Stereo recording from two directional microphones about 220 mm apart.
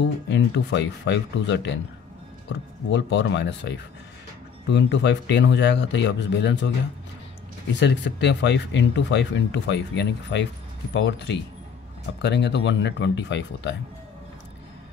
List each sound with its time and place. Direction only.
0.0 s speech: 55° left (ahead or behind)
2.9 s speech: 55° left (ahead or behind)
7.8 s speech: 55° left (ahead or behind)